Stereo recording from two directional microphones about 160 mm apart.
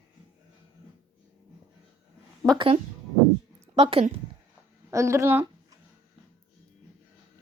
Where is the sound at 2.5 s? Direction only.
35° right (ahead or behind).